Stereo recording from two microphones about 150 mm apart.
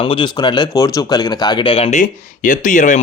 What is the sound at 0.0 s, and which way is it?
Speech, 35° left (ahead or behind).